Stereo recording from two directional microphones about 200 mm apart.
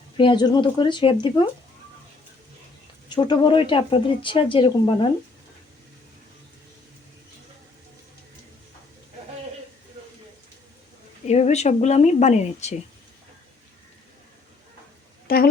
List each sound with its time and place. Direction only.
0.2 s speech: 25° left (ahead or behind)
3.1 s speech: 20° left (ahead or behind)
11.3 s speech: 35° left (ahead or behind)
15.3 s a woman's voice: 50° left (ahead or behind)